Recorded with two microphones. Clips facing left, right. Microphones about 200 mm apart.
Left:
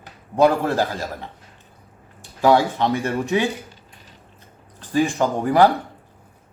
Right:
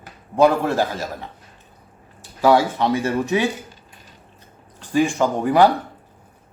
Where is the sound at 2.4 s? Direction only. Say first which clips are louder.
Even; 15° left (ahead or behind).